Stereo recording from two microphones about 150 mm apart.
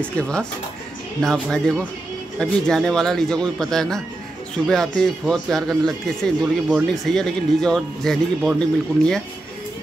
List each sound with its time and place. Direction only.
0.0 s speech: 10° left (ahead or behind)